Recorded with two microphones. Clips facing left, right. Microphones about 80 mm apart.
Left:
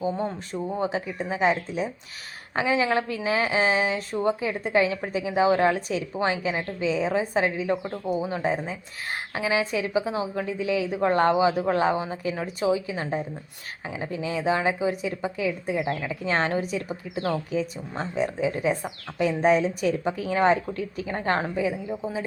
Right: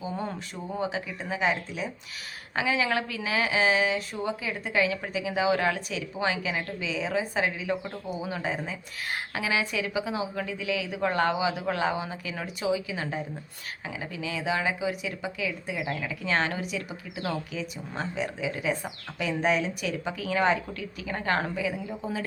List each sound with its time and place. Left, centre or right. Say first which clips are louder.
0.1 s a woman's voice: left 5 dB; left